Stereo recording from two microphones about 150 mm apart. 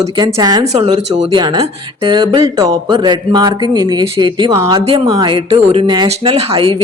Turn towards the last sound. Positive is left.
turn(degrees=-40)  # may be behind; listen again after turning